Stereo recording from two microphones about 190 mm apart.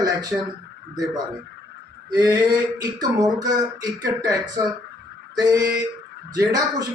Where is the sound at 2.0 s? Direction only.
20° right (ahead or behind).